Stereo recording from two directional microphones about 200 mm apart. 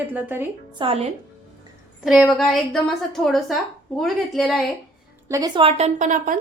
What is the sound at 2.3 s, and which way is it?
A woman's voice, centre (ahead or behind).